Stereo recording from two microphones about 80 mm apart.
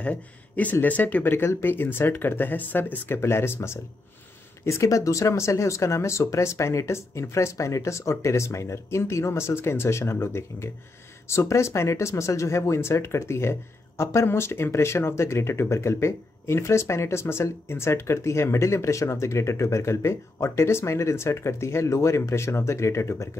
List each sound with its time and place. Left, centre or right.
0.0 s speech: centre; by 23.3 s left